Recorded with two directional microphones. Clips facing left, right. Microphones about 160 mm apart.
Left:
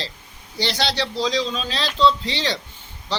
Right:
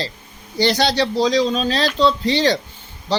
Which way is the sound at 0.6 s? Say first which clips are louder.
Right 7 dB; 45° right (ahead or behind).